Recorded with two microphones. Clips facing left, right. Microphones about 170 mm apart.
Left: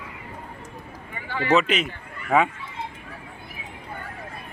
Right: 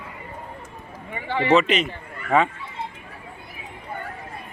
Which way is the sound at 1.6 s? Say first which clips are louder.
Right 2 dB; centre (ahead or behind).